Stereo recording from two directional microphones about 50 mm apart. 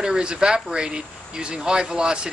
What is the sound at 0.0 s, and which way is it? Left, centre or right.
Speech, centre.